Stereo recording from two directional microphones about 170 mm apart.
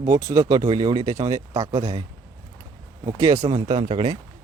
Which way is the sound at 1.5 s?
40° right (ahead or behind).